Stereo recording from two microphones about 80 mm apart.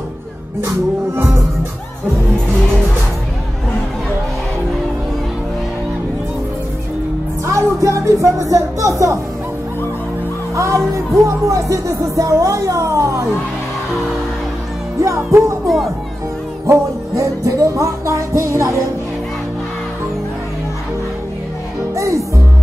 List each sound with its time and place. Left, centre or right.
0.6 s music: right
7.4 s speech: right
10.5 s music: right
15.0 s music: right
15.6 s speech: centre
16.6 s music: right
21.9 s music: right